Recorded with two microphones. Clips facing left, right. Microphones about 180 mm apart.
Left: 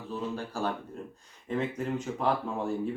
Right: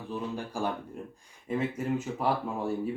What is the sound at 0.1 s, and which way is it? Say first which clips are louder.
Speech: even; 15° right (ahead or behind).